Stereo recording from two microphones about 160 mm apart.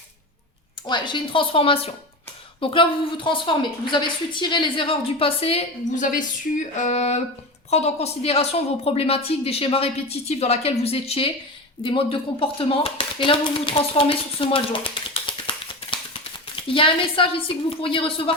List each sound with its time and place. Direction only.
0.9 s a woman's voice: 30° left (ahead or behind)
6.0 s a woman's voice: 55° left (ahead or behind)
6.7 s a sound: 45° left (ahead or behind)
7.7 s a woman's voice: 40° left (ahead or behind)